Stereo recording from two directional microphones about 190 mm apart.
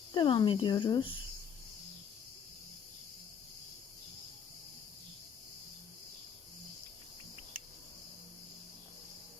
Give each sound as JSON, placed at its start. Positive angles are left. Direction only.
{"t": 0.1, "sound": "speech", "side_deg": 25}